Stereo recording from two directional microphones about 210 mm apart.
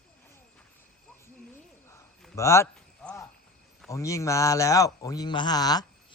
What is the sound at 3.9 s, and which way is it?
Speech, 15° left (ahead or behind).